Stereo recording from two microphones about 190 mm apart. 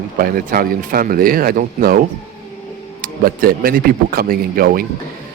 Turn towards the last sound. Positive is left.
turn(degrees=-50)  # may be behind; listen again after turning